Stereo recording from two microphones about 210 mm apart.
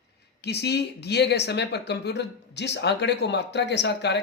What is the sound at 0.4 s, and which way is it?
Speech, 50° left (ahead or behind).